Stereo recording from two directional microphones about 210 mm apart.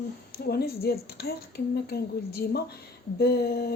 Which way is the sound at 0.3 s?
50° left (ahead or behind).